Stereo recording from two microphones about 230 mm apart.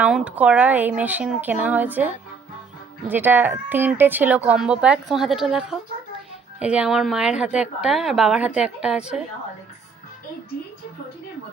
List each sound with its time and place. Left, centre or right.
0.0 s a woman's voice: centre